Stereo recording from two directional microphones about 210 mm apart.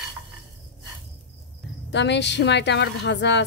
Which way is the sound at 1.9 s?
55° left (ahead or behind).